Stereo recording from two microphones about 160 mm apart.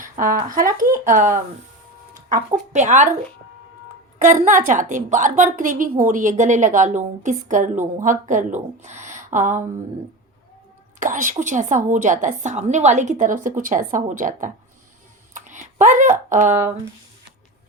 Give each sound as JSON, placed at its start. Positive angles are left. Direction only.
{"t": 0.0, "sound": "speech", "side_deg": -60}
{"t": 2.7, "sound": "a woman's voice", "side_deg": -50}
{"t": 4.2, "sound": "a woman's voice", "side_deg": -50}
{"t": 11.0, "sound": "a woman's voice", "side_deg": -55}